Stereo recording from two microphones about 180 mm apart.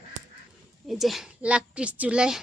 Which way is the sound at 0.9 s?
Centre (ahead or behind).